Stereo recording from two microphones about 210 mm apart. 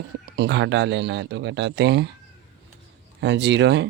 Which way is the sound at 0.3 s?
55° right (ahead or behind).